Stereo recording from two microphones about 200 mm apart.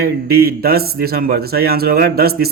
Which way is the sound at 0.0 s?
50° right (ahead or behind).